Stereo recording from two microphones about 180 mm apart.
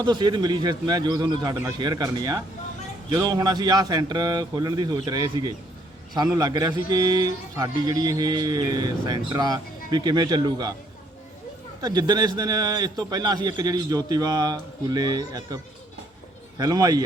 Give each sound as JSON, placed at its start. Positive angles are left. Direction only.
{"t": 0.0, "sound": "a man's voice", "side_deg": -25}
{"t": 11.8, "sound": "a man's voice", "side_deg": -20}